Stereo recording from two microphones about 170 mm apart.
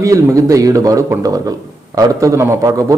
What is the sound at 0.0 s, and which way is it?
A man's voice, 20° right (ahead or behind).